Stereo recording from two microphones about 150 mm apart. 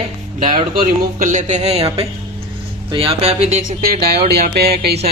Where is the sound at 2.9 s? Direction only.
40° right (ahead or behind).